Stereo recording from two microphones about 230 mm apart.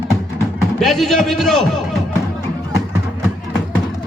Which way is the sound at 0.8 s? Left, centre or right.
Centre.